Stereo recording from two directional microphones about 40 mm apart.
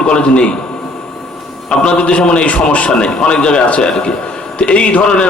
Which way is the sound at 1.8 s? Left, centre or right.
Left.